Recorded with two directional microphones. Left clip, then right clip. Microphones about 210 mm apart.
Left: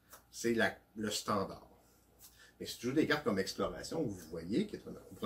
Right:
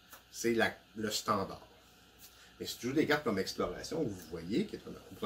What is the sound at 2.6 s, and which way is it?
Speech, 20° right (ahead or behind).